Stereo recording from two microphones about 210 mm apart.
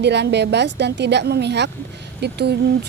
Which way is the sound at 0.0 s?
55° right (ahead or behind).